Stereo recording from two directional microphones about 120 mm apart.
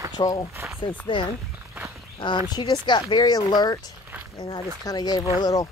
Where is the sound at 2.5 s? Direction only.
40° left (ahead or behind).